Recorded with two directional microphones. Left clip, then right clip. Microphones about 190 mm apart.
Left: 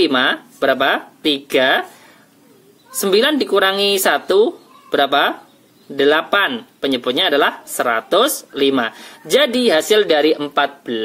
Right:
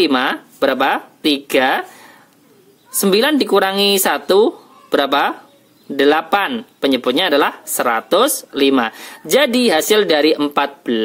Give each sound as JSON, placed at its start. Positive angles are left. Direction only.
{"t": 0.0, "sound": "speech", "side_deg": -35}
{"t": 3.0, "sound": "speech", "side_deg": -35}